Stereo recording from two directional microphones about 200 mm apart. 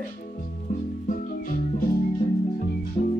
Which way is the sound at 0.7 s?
40° left (ahead or behind).